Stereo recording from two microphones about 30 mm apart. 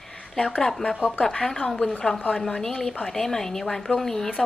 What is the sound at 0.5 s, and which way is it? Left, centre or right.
A woman's voice, left.